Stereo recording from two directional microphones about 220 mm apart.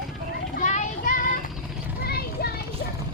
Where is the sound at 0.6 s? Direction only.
35° left (ahead or behind).